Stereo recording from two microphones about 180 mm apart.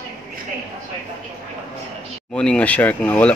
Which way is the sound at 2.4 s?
5° left (ahead or behind).